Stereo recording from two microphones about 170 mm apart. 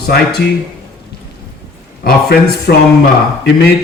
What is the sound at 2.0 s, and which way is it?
Speech, 65° left (ahead or behind).